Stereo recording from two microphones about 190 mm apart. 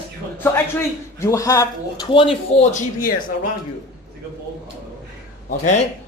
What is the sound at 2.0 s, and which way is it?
Speech, 30° left (ahead or behind).